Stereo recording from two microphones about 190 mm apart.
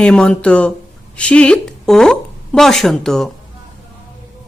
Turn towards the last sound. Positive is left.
turn(degrees=0)  # may be behind; listen again after turning